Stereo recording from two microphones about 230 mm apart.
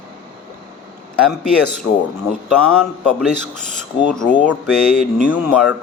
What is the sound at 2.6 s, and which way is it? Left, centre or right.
Speech, centre.